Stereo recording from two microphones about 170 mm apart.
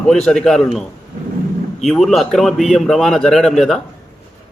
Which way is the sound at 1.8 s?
Centre (ahead or behind).